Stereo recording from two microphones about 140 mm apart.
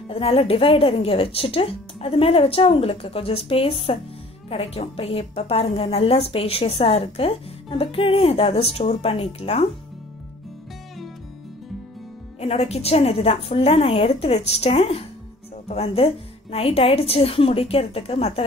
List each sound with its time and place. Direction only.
0.1 s a woman's voice: 45° left (ahead or behind)
12.4 s a woman's voice: 45° left (ahead or behind)